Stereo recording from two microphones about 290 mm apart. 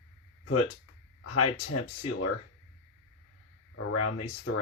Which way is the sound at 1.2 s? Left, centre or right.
Left.